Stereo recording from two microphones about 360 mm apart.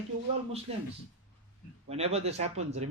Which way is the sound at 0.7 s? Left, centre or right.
Centre.